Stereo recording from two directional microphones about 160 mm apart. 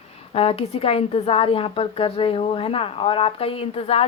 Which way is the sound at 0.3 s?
35° left (ahead or behind).